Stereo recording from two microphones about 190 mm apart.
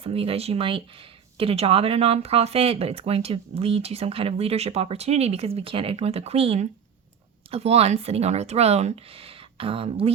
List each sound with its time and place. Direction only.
0.0 s speech: 30° right (ahead or behind)